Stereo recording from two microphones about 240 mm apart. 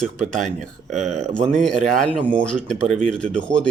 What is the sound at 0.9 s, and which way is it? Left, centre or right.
Speech, right.